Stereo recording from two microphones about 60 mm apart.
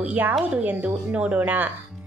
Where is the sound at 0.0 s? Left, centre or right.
Right.